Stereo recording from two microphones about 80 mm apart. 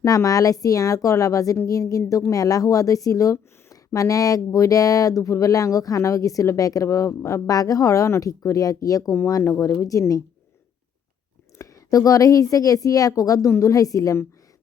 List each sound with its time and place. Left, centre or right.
0.0 s speech: left
9.1 s speech: left
11.5 s a woman's voice: left